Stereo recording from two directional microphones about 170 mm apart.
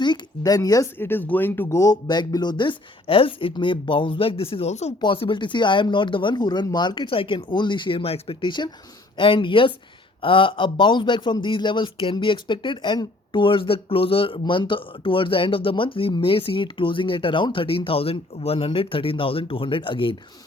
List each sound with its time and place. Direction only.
0.0 s speech: 25° left (ahead or behind); by 4.9 s 40° left (ahead or behind)
4.9 s speech: 30° left (ahead or behind)